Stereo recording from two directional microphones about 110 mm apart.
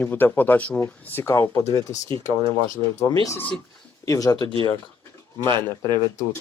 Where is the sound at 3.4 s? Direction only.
15° left (ahead or behind).